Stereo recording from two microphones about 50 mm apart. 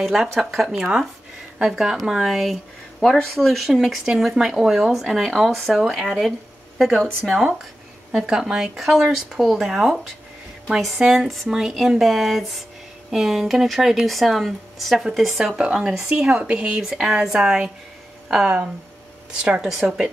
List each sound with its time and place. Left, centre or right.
0.0 s speech: centre
8.1 s speech: centre
15.5 s speech: centre
19.3 s speech: centre